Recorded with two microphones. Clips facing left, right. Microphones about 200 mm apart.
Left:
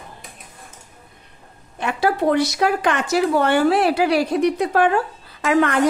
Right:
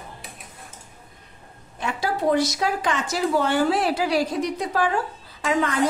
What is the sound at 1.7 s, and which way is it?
A woman's voice, 65° left (ahead or behind).